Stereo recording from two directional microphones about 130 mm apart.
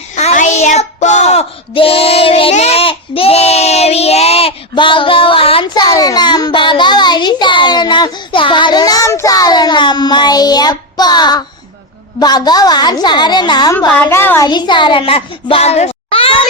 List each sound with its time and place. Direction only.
0.2 s child singing: 60° left (ahead or behind)
4.7 s female singing: 40° left (ahead or behind)
5.9 s a sound: 30° left (ahead or behind)
12.2 s a woman's voice: 30° left (ahead or behind)
13.7 s a woman's voice: 15° left (ahead or behind)
14.4 s a child's voice: 35° left (ahead or behind)